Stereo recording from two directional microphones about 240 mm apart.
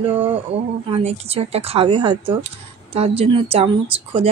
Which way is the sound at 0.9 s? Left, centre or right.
Right.